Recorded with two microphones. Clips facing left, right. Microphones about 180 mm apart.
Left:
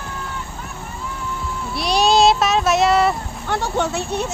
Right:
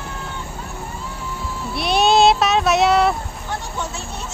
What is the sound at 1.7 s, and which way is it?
Child singing, centre (ahead or behind).